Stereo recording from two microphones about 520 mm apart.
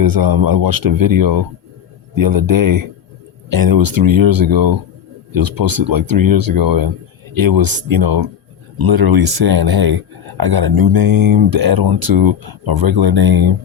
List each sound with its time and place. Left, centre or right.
0.0 s speech: right